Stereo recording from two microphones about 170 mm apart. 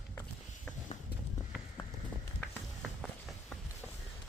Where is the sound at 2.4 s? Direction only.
5° left (ahead or behind).